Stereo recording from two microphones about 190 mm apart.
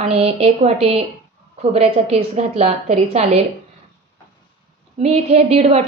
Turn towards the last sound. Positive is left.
turn(degrees=-35)  # may be behind; listen again after turning